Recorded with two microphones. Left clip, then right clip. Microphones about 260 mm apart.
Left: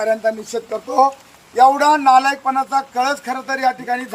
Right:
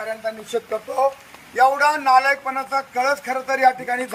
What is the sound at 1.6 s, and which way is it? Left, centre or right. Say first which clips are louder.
Speech: left 5 dB; left.